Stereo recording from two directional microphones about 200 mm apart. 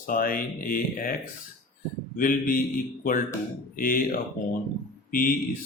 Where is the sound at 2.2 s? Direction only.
45° left (ahead or behind).